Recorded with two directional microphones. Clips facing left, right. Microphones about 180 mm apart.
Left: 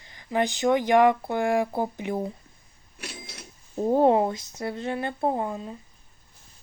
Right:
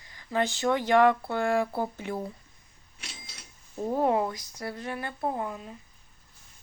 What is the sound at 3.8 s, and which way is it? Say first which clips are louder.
Speech: left 6 dB; 30° left (ahead or behind).